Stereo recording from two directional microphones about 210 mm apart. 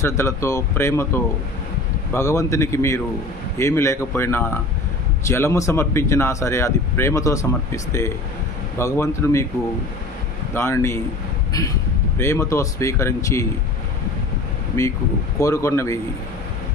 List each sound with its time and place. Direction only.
0.0 s speech: 15° left (ahead or behind)
10.5 s speech: 10° left (ahead or behind)
15.4 s speech: 15° left (ahead or behind)